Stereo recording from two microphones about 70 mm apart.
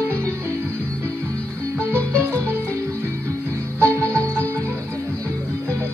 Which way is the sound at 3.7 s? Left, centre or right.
Right.